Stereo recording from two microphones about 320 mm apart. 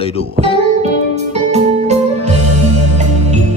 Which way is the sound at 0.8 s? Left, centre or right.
Right.